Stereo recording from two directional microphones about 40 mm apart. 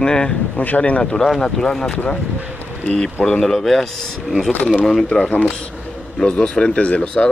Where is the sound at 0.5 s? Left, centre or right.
Left.